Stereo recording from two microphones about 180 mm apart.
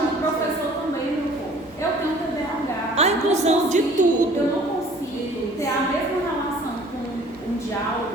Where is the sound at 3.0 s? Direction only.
40° right (ahead or behind).